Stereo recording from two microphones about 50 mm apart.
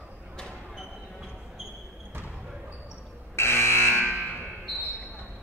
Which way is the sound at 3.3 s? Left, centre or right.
Left.